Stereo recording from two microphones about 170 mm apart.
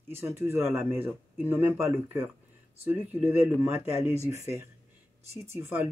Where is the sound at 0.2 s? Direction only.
15° right (ahead or behind).